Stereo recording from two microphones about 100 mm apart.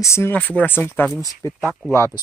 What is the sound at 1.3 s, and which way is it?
Speech, 30° left (ahead or behind).